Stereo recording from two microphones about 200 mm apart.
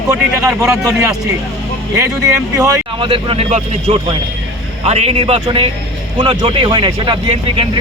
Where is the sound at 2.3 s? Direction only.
15° right (ahead or behind).